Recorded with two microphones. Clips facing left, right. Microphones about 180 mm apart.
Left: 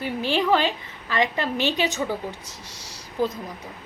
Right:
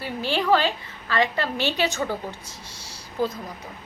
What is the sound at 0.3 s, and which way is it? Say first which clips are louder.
A woman's voice: right 1 dB; 20° left (ahead or behind).